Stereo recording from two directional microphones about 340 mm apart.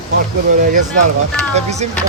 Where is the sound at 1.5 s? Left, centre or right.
Centre.